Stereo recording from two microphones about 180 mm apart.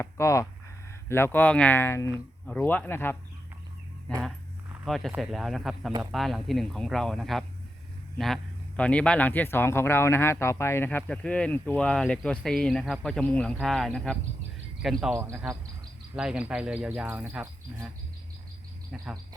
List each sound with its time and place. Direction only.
0.0 s speech: 15° left (ahead or behind)
4.1 s walk: 5° left (ahead or behind)
4.9 s cricket: centre (ahead or behind)
8.2 s speech: 5° left (ahead or behind); by 15.5 s 10° right (ahead or behind)
16.1 s cricket: 5° right (ahead or behind)